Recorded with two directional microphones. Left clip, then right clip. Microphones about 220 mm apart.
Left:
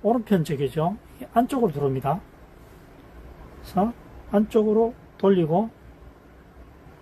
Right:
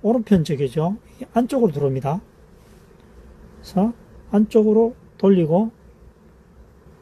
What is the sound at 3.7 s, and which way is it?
Speech, 25° right (ahead or behind).